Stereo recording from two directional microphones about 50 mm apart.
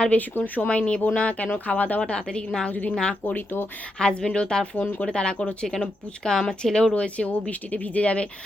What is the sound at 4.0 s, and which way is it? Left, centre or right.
Speech, centre.